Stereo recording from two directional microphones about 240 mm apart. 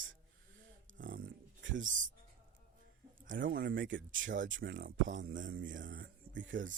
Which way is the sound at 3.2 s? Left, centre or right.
Right.